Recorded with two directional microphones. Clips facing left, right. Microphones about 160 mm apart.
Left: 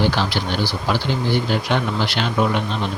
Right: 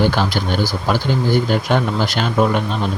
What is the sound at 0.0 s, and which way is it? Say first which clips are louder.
Speech: right 3 dB; 45° right (ahead or behind).